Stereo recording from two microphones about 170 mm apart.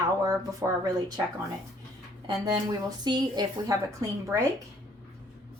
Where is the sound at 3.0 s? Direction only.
25° right (ahead or behind).